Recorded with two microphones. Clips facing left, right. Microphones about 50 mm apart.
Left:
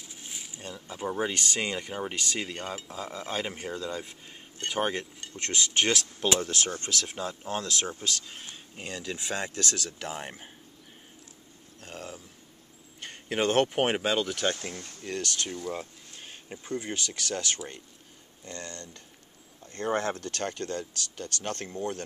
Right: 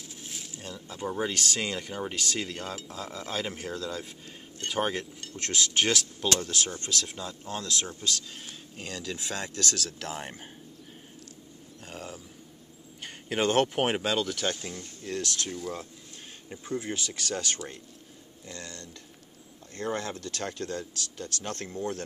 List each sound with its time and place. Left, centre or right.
0.0 s speech: centre
6.2 s speech: centre
6.5 s speech: left
9.8 s speech: centre
11.8 s a sound: centre
13.0 s speech: centre
14.5 s speech: left
15.0 s speech: centre
16.7 s speech: centre
20.0 s speech: left
20.4 s speech: centre